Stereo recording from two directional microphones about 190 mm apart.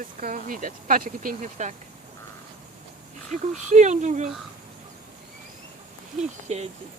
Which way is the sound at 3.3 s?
40° right (ahead or behind).